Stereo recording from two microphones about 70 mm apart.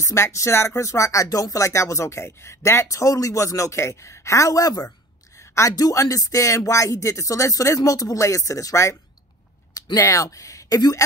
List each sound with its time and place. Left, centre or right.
0.0 s speech: left
5.5 s speech: left
5.8 s speech: left